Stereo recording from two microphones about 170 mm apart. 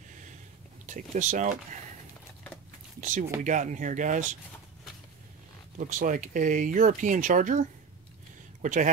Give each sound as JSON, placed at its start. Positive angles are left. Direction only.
{"t": 0.8, "sound": "speech", "side_deg": -45}
{"t": 3.0, "sound": "speech", "side_deg": -50}
{"t": 5.8, "sound": "speech", "side_deg": -50}
{"t": 8.6, "sound": "speech", "side_deg": -50}